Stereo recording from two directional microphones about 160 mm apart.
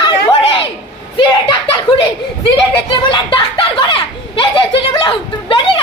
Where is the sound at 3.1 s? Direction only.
30° left (ahead or behind).